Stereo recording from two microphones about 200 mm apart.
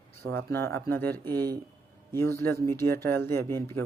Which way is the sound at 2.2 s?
15° left (ahead or behind).